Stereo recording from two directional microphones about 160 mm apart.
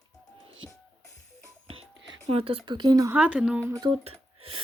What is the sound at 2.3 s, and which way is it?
Speech, 35° right (ahead or behind).